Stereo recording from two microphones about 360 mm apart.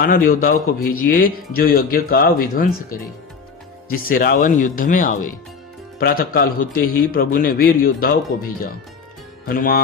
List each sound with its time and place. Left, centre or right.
0.0 s a man's voice: left
3.8 s a man's voice: left
9.5 s a man's voice: left